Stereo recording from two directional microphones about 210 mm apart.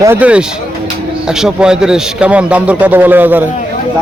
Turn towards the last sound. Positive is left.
turn(degrees=-10)  # may be behind; listen again after turning